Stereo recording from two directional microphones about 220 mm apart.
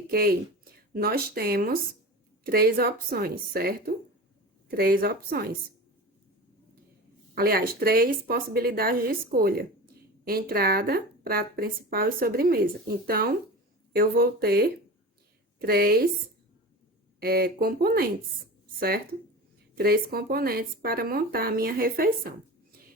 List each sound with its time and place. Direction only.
0.1 s speech: 45° right (ahead or behind)
7.3 s a woman's voice: 45° right (ahead or behind)
17.2 s speech: 45° right (ahead or behind)